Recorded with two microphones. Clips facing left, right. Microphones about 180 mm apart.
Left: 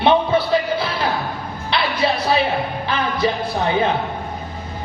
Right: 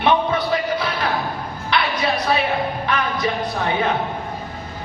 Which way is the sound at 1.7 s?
30° left (ahead or behind).